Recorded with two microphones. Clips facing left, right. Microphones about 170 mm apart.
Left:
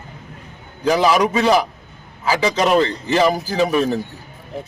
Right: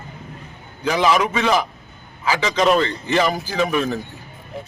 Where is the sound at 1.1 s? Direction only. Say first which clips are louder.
Left 3 dB; 35° left (ahead or behind).